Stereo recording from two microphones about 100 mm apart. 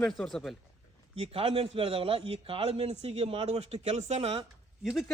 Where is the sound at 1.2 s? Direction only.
75° right (ahead or behind).